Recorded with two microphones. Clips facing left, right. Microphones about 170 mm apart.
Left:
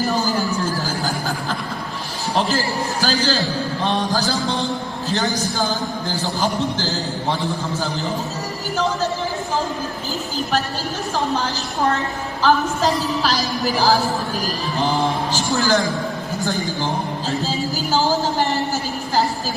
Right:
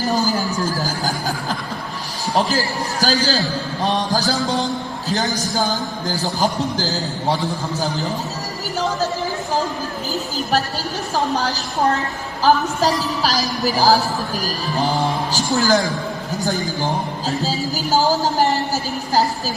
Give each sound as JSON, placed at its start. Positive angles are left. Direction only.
{"t": 0.1, "sound": "a sound", "side_deg": -40}
{"t": 2.3, "sound": "a man's voice", "side_deg": -40}
{"t": 6.1, "sound": "speech", "side_deg": -40}
{"t": 12.4, "sound": "speech", "side_deg": -40}
{"t": 15.3, "sound": "speech", "side_deg": -40}